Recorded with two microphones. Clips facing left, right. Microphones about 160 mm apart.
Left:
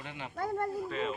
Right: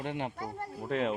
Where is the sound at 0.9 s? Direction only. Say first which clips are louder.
Right 8 dB; 65° right (ahead or behind).